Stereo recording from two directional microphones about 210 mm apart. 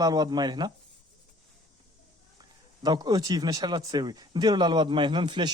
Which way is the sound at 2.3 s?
20° right (ahead or behind).